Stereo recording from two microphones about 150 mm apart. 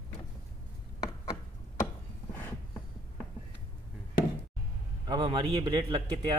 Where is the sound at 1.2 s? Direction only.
45° left (ahead or behind).